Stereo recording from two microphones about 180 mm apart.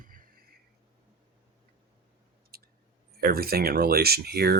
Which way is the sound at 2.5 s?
60° right (ahead or behind).